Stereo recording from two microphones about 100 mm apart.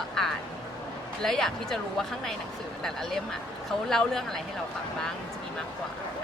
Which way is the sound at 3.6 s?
5° left (ahead or behind).